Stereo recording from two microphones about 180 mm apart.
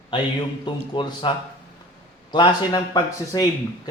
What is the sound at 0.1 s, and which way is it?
Speech, 25° left (ahead or behind).